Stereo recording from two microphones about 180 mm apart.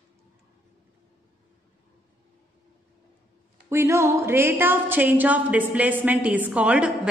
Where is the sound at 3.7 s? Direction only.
15° right (ahead or behind).